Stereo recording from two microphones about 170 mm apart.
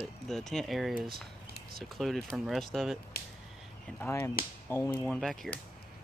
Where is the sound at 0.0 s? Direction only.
Centre (ahead or behind).